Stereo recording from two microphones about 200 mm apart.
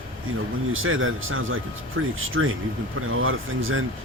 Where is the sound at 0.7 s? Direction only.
90° right.